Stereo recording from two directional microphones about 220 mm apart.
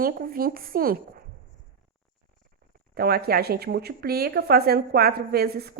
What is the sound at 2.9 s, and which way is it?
A woman's voice, 45° right (ahead or behind).